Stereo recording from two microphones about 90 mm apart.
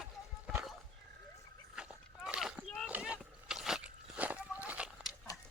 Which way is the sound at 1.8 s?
10° right (ahead or behind).